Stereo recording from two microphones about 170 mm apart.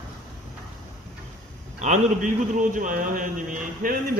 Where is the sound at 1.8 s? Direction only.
45° right (ahead or behind).